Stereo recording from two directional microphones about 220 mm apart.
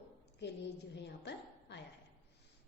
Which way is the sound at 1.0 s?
50° left (ahead or behind).